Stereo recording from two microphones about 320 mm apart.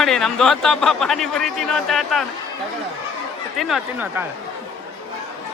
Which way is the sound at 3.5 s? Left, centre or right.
Centre.